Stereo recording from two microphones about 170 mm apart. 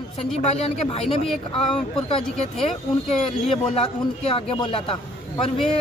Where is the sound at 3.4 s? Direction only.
35° left (ahead or behind).